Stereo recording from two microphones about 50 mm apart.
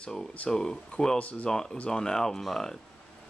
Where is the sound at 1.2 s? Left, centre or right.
Left.